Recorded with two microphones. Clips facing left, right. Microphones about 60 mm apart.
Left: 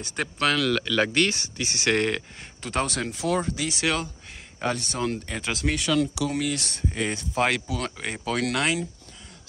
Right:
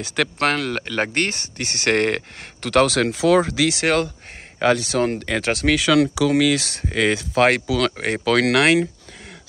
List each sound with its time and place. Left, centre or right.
0.4 s speech: right
3.8 s speech: right
4.6 s speech: right
5.2 s speech: right
7.9 s speech: right